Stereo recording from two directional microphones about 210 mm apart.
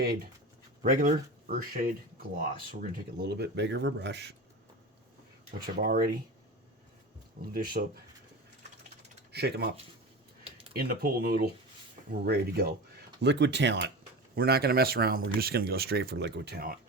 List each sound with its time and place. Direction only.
0.0 s speech: 45° right (ahead or behind)
3.2 s speech: 50° right (ahead or behind)
5.5 s speech: 45° right (ahead or behind)
7.5 s speech: 45° right (ahead or behind)
9.3 s speech: 50° right (ahead or behind)
10.8 s speech: 45° right (ahead or behind)